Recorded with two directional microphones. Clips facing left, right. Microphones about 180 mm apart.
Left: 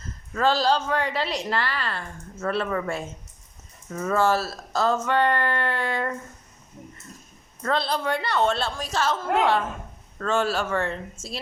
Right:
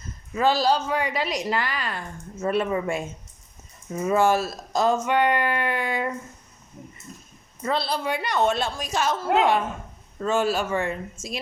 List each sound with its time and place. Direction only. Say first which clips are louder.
0.3 s a woman's voice: right 1 dB; 10° right (ahead or behind)
7.6 s a woman's voice: left 1 dB; 10° right (ahead or behind)